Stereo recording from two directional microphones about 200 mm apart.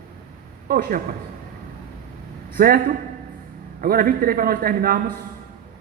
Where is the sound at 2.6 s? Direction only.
50° right (ahead or behind).